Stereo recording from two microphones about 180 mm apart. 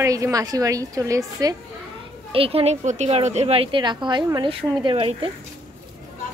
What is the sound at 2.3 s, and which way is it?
A woman's voice, 30° right (ahead or behind).